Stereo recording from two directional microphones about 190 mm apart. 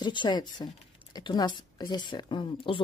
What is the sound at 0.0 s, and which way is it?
A woman's voice, 25° left (ahead or behind).